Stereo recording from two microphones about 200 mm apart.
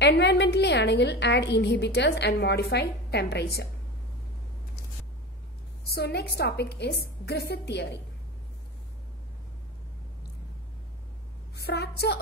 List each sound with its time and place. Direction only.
0.0 s a woman's voice: 60° left (ahead or behind)
5.9 s a woman's voice: 55° left (ahead or behind)
11.5 s a woman's voice: 55° left (ahead or behind)